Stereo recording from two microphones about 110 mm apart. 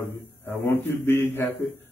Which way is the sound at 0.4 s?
20° left (ahead or behind).